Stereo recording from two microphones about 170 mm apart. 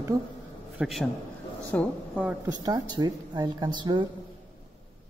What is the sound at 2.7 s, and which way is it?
Speech, 25° right (ahead or behind).